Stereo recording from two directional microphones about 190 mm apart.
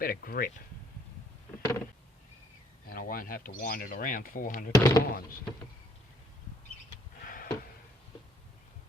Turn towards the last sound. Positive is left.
turn(degrees=50)  # may be behind; listen again after turning